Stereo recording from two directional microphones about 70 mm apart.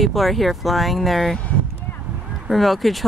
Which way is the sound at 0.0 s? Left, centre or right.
Centre.